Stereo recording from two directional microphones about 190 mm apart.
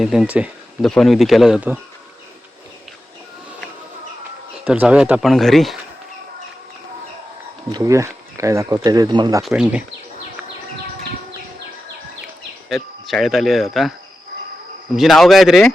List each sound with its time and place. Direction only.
0.0 s speech: centre (ahead or behind)
4.6 s speech: 5° right (ahead or behind)
7.7 s speech: 15° right (ahead or behind)
9.4 s speech: 5° right (ahead or behind)
12.6 s speech: centre (ahead or behind)
14.9 s speech: centre (ahead or behind)